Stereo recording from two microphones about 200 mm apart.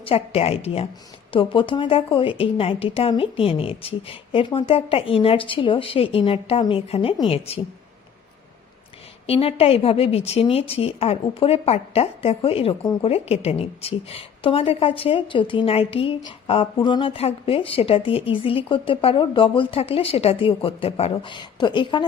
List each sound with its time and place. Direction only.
0.0 s a woman's voice: 30° left (ahead or behind)
9.2 s a woman's voice: 30° left (ahead or behind)